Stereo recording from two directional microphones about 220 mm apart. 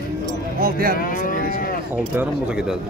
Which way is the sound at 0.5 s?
40° right (ahead or behind).